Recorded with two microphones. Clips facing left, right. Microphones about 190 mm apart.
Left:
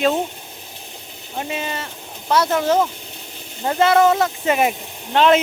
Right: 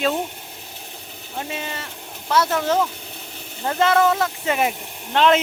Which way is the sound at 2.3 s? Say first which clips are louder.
Left 2 dB; 20° left (ahead or behind).